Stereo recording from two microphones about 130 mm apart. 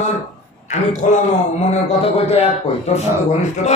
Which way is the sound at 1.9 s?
50° left (ahead or behind).